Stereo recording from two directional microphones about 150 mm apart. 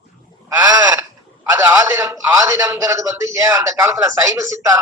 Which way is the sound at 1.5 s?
20° right (ahead or behind).